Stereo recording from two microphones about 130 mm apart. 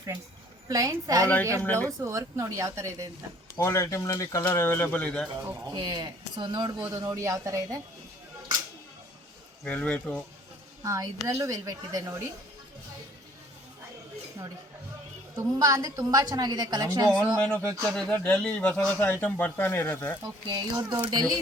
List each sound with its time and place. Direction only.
0.7 s a woman's voice: 25° right (ahead or behind)
1.6 s speech: 15° left (ahead or behind)
2.0 s a woman's voice: 20° right (ahead or behind)
3.6 s speech: 20° left (ahead or behind)
5.7 s a woman's voice: 35° right (ahead or behind)
9.6 s speech: 10° left (ahead or behind)
10.8 s a woman's voice: 25° right (ahead or behind)
15.4 s a woman's voice: 25° right (ahead or behind)
17.1 s speech: centre (ahead or behind)
20.5 s speech: 35° right (ahead or behind)